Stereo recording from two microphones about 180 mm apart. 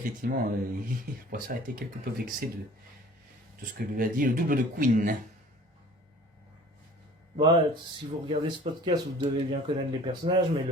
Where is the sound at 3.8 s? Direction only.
50° right (ahead or behind).